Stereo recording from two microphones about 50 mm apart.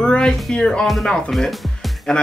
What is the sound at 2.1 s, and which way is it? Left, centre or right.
Speech, centre.